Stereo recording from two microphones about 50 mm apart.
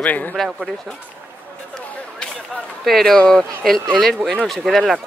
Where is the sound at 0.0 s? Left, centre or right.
Left.